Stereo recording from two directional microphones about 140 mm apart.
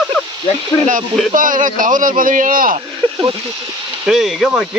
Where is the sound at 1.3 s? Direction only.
70° right (ahead or behind).